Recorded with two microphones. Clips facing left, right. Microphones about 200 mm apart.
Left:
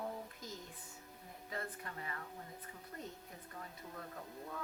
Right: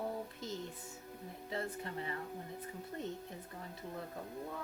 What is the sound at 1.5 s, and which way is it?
Speech, 25° right (ahead or behind).